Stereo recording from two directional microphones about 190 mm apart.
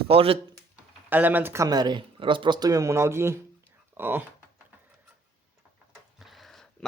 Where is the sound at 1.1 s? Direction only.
10° right (ahead or behind).